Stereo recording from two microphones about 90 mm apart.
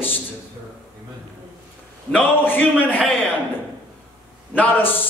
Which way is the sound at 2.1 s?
20° left (ahead or behind).